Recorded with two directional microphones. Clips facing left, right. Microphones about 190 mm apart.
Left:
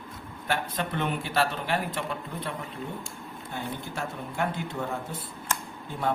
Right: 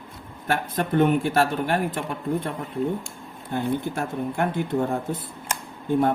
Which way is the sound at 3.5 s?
55° right (ahead or behind).